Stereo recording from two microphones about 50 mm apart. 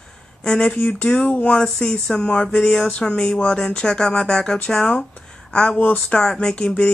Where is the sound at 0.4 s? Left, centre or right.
Centre.